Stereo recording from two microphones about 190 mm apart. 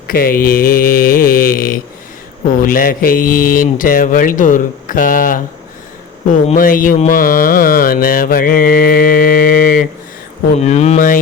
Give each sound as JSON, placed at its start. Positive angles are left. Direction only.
{"t": 0.1, "sound": "mantra", "side_deg": 50}
{"t": 10.6, "sound": "speech", "side_deg": 35}